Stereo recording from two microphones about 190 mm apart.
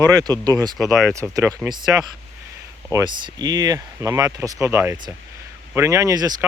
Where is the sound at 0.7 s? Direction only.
Centre (ahead or behind).